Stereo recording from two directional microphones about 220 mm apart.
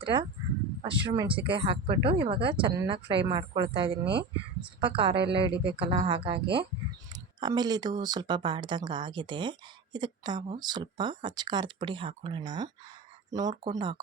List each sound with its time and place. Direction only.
0.0 s speech: 20° right (ahead or behind)
4.0 s speech: 50° right (ahead or behind)
4.8 s speech: 25° right (ahead or behind)